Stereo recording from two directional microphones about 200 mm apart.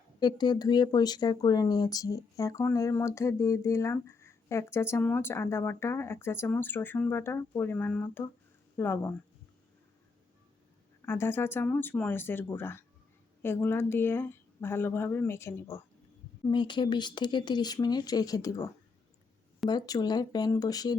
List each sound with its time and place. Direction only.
0.2 s speech: 20° left (ahead or behind)
11.0 s speech: 10° left (ahead or behind)
16.5 s speech: 25° left (ahead or behind)